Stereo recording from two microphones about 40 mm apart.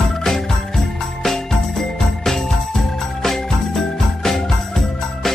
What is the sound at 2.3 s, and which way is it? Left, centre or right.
Music, centre.